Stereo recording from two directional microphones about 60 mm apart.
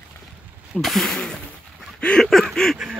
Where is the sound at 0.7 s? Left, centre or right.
Centre.